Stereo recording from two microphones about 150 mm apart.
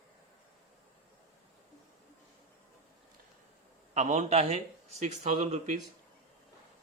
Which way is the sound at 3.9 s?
50° right (ahead or behind).